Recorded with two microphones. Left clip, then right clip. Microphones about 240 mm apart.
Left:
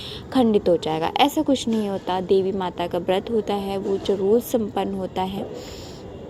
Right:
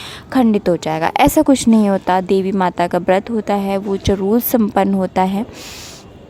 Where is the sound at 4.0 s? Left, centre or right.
Right.